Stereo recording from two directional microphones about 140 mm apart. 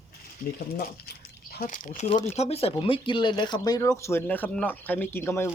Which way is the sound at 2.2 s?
50° left (ahead or behind).